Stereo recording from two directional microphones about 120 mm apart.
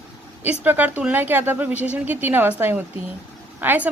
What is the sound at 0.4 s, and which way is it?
A woman's voice, 15° right (ahead or behind).